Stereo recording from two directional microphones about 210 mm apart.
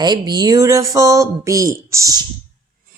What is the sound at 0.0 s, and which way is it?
Speech, 20° right (ahead or behind).